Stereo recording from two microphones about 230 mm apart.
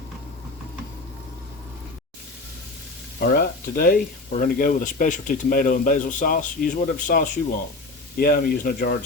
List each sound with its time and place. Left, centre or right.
3.2 s speech: left